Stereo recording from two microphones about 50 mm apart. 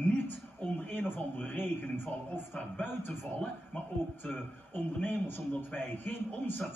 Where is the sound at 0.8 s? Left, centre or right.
Left.